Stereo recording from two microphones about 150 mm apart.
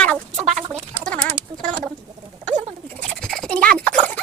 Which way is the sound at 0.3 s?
50° right (ahead or behind).